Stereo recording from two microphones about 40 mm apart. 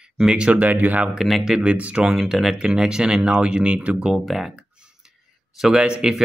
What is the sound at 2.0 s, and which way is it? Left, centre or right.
Speech, centre.